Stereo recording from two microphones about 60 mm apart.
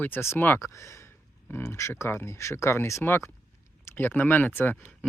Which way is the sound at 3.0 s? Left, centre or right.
Left.